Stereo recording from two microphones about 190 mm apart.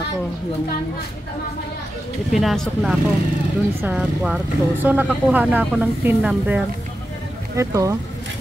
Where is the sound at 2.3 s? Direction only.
Centre (ahead or behind).